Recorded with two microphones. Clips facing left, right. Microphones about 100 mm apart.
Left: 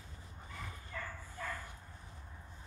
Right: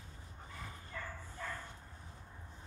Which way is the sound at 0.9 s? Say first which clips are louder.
Even; 5° right (ahead or behind).